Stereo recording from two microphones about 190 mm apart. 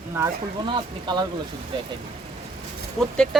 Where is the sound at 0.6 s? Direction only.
25° right (ahead or behind).